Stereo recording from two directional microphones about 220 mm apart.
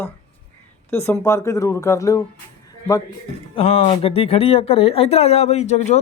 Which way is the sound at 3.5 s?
30° left (ahead or behind).